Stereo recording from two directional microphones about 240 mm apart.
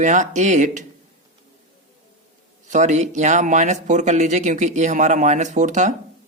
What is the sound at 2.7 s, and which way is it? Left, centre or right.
Speech, right.